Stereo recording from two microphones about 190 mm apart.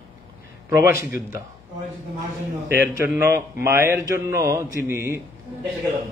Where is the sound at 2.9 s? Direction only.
15° right (ahead or behind).